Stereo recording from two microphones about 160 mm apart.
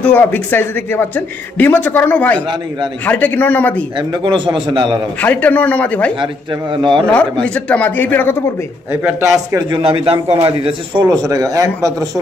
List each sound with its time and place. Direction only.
0.0 s speech: 10° left (ahead or behind)
4.1 s a man's voice: 30° right (ahead or behind)
5.2 s speech: 10° left (ahead or behind)
6.7 s a man's voice: 30° right (ahead or behind)
7.4 s speech: 5° left (ahead or behind)
9.0 s a man's voice: 20° right (ahead or behind)